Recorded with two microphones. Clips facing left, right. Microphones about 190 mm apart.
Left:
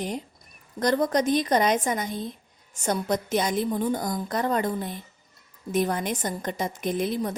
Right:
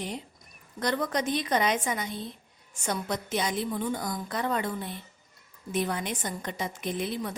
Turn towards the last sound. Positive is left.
turn(degrees=45)  # may be behind; listen again after turning